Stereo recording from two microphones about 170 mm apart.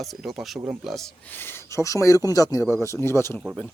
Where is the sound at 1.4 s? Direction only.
15° left (ahead or behind).